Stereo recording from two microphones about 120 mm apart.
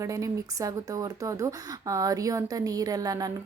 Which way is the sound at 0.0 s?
25° right (ahead or behind).